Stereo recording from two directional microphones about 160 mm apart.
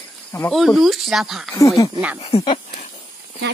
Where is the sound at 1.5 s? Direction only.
20° left (ahead or behind).